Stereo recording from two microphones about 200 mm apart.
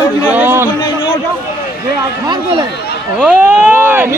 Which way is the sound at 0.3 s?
10° right (ahead or behind).